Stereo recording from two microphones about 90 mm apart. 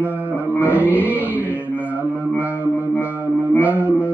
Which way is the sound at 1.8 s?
15° right (ahead or behind).